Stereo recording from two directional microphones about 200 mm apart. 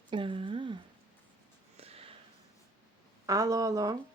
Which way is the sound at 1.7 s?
30° right (ahead or behind).